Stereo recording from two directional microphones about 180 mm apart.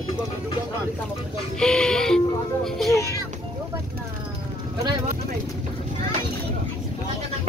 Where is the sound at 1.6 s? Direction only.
5° left (ahead or behind).